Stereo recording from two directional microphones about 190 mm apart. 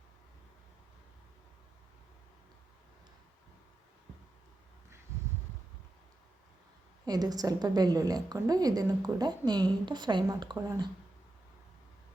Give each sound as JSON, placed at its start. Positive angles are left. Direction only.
{"t": 7.0, "sound": "a woman's voice", "side_deg": -20}